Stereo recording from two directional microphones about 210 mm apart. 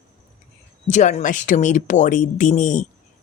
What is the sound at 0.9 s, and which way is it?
Speech, 35° left (ahead or behind).